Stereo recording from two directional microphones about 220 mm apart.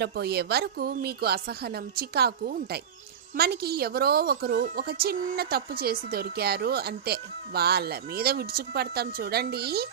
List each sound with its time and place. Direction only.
0.0 s a woman's voice: 45° right (ahead or behind)